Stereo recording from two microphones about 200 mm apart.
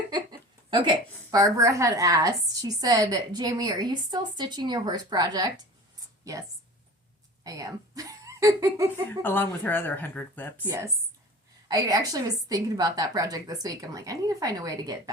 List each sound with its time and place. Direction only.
0.1 s a woman's voice: 20° right (ahead or behind)
9.0 s speech: 10° left (ahead or behind)
10.7 s a woman's voice: 15° right (ahead or behind)